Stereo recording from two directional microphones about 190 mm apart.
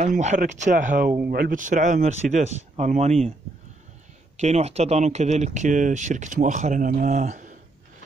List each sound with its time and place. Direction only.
0.0 s speech: 40° right (ahead or behind)
4.4 s speech: 35° right (ahead or behind)